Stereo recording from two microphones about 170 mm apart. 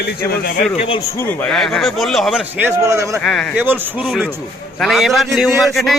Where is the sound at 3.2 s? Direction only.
5° left (ahead or behind).